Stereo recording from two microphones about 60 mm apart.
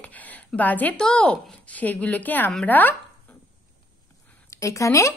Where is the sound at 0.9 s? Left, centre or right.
Centre.